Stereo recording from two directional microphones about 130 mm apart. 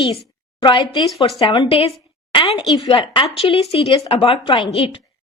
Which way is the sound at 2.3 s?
35° left (ahead or behind).